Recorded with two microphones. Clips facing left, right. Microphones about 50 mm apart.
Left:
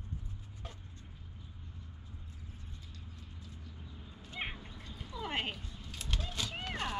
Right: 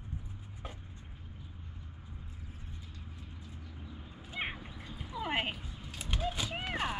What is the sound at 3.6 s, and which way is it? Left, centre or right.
Cat, centre.